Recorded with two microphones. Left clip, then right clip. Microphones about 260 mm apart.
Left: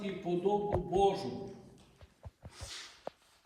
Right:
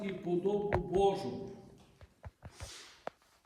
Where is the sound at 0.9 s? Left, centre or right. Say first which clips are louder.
Left 1 dB; centre.